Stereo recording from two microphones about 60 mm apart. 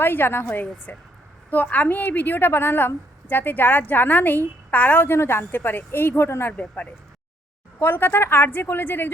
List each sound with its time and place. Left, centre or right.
0.0 s a woman's voice: left
5.1 s a woman's voice: left
7.8 s a woman's voice: left